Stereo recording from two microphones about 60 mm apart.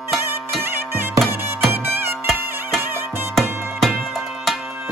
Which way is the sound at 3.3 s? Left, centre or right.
Centre.